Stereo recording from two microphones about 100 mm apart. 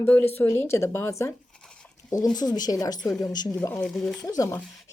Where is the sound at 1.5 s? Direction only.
10° left (ahead or behind).